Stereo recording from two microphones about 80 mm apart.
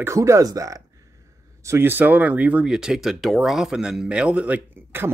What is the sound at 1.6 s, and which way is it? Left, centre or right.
Speech, right.